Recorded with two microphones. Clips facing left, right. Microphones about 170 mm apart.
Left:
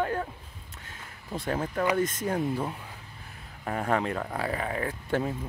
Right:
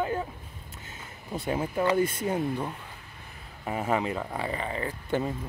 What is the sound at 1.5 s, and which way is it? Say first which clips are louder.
Speech: right 1 dB; 10° right (ahead or behind).